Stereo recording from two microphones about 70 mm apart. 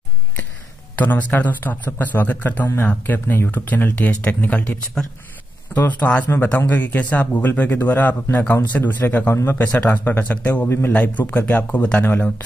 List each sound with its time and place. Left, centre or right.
0.9 s a man's voice: left
5.0 s speech: centre
5.8 s a man's voice: left